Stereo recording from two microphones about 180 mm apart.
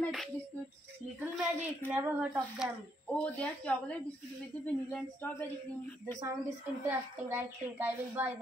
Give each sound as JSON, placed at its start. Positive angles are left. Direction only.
{"t": 0.0, "sound": "a sound", "side_deg": 0}
{"t": 1.9, "sound": "a woman's voice", "side_deg": -10}
{"t": 3.1, "sound": "a woman's voice", "side_deg": 5}
{"t": 6.2, "sound": "a woman's voice", "side_deg": -15}